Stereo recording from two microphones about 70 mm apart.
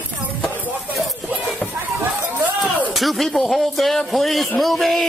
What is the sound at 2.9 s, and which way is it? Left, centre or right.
Speech, centre.